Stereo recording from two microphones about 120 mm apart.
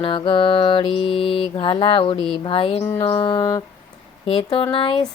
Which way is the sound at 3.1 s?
45° left (ahead or behind).